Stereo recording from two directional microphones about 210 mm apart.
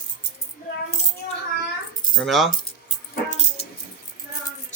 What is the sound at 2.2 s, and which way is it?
Speech, centre (ahead or behind).